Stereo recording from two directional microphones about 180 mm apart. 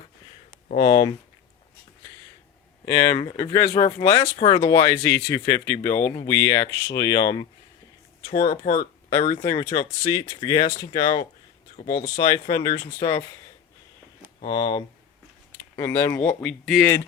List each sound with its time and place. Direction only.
0.8 s speech: 25° left (ahead or behind)
2.8 s speech: 20° left (ahead or behind)
8.4 s speech: 50° left (ahead or behind)
9.3 s speech: 25° left (ahead or behind)
14.4 s speech: 25° left (ahead or behind); by 16.9 s centre (ahead or behind)